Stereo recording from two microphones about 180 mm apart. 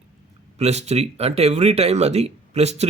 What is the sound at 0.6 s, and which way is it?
Speech, 40° right (ahead or behind).